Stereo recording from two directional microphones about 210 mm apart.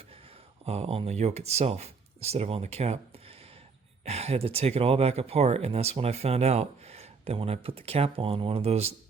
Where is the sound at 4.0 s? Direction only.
30° right (ahead or behind).